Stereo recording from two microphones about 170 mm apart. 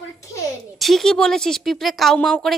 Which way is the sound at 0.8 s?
Centre (ahead or behind).